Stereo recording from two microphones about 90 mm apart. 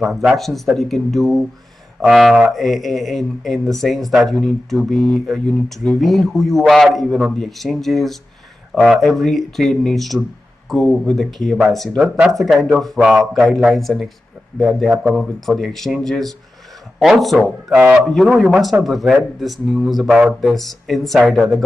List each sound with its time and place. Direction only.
0.0 s speech: centre (ahead or behind)
20.2 s speech: 10° right (ahead or behind)
20.5 s speech: centre (ahead or behind)